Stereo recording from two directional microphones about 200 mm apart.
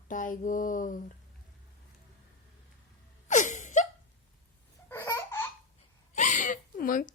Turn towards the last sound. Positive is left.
turn(degrees=40)  # may be behind; listen again after turning